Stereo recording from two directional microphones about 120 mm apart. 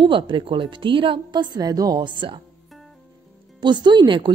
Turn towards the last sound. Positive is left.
turn(degrees=-40)  # may be behind; listen again after turning